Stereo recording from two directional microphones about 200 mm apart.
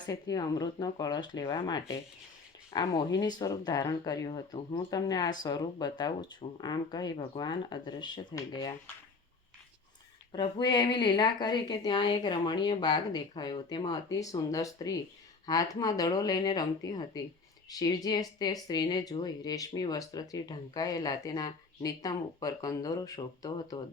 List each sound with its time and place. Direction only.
0.1 s speech: 20° left (ahead or behind)
10.3 s speech: 20° left (ahead or behind)